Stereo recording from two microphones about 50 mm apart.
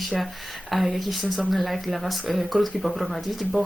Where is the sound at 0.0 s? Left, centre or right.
Centre.